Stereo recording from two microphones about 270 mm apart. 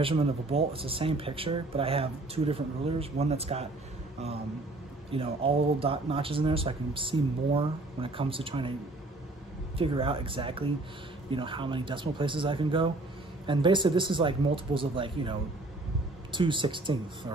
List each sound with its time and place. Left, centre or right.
0.0 s speech: right
5.1 s speech: right
9.8 s speech: centre